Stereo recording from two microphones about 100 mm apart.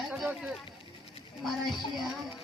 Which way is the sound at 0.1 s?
10° right (ahead or behind).